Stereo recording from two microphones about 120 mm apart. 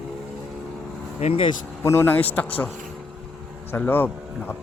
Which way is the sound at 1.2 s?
50° left (ahead or behind).